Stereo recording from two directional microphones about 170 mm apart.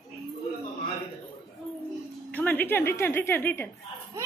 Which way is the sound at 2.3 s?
10° left (ahead or behind).